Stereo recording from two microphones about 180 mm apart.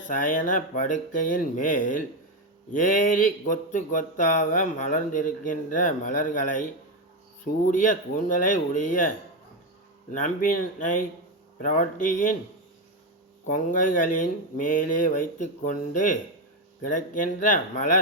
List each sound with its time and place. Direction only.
0.2 s speech: 50° left (ahead or behind)
13.7 s speech: 45° left (ahead or behind)
17.4 s speech: 45° left (ahead or behind)